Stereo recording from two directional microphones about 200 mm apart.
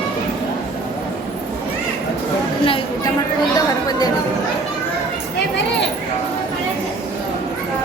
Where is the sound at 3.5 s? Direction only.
20° left (ahead or behind).